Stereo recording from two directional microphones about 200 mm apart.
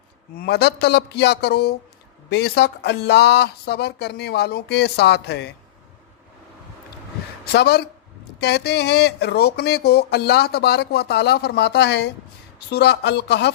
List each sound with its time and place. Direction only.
0.3 s speech: 55° left (ahead or behind)
7.5 s speech: 55° left (ahead or behind)